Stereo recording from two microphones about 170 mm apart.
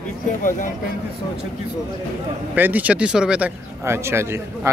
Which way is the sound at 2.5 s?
10° right (ahead or behind).